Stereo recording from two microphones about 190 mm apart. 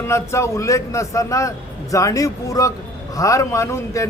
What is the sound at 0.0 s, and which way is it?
Speech, 15° left (ahead or behind).